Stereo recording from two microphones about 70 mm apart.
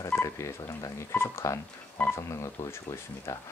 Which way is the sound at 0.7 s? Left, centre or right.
Left.